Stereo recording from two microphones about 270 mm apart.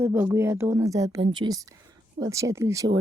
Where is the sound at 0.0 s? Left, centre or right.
Centre.